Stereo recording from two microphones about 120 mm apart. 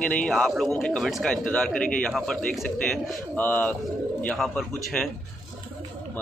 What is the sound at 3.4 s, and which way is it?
Speech, 15° left (ahead or behind).